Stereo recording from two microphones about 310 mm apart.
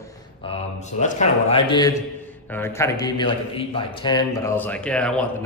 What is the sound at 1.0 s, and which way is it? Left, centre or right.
A man's voice, left.